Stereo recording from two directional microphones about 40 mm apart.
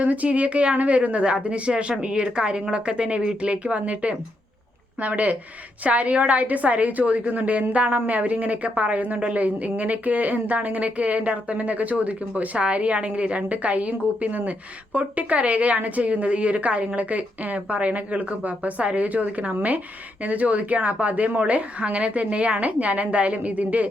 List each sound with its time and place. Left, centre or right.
0.0 s a woman's voice: right